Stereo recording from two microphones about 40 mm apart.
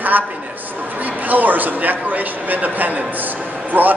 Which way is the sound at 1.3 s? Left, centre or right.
Right.